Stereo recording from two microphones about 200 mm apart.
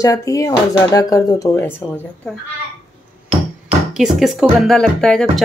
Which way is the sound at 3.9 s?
Centre (ahead or behind).